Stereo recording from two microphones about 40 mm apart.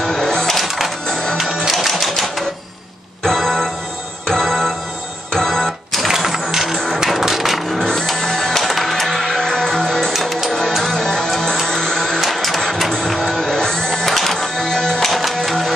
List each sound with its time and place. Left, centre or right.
0.0 s music: centre
0.6 s music: centre
1.0 s music: centre
1.7 s typewriter: centre
3.3 s music: centre
6.0 s sewing machine: centre
6.7 s music: centre
7.8 s music: centre
12.4 s printer: centre
13.0 s music: centre